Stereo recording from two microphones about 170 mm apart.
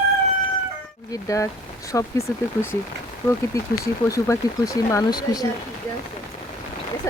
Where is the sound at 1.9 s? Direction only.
20° left (ahead or behind).